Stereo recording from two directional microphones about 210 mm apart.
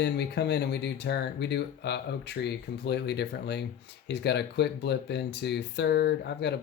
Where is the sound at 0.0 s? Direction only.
50° left (ahead or behind).